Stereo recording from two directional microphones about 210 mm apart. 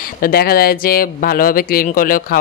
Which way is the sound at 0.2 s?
45° left (ahead or behind).